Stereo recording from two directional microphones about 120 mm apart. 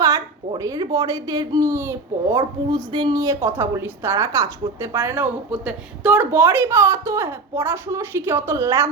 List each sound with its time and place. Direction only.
0.0 s speech: 25° right (ahead or behind)
2.7 s a woman's voice: 40° right (ahead or behind); by 8.9 s 25° right (ahead or behind)